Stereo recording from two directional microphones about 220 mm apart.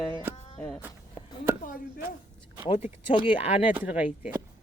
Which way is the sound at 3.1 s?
30° left (ahead or behind).